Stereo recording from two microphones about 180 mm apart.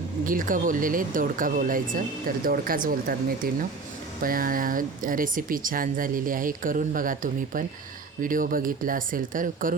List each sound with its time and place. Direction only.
0.3 s speech: 50° right (ahead or behind)